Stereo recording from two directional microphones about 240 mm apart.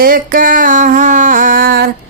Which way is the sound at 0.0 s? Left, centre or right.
Right.